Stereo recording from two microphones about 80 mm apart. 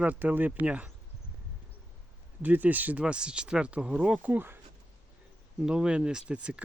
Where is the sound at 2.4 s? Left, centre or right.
Right.